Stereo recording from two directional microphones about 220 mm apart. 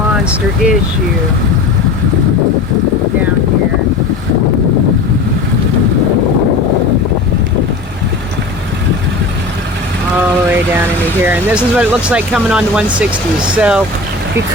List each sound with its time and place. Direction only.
0.3 s speech: 5° right (ahead or behind)
11.2 s speech: 5° right (ahead or behind)